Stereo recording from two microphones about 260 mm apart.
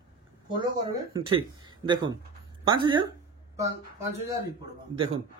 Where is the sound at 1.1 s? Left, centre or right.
Centre.